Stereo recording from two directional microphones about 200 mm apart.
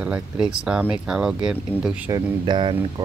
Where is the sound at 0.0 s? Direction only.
5° right (ahead or behind).